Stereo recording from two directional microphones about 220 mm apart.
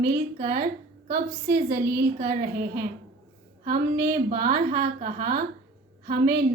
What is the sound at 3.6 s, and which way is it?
A woman's voice, 40° right (ahead or behind).